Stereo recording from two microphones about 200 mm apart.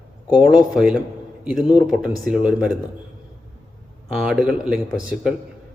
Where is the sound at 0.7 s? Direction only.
5° right (ahead or behind).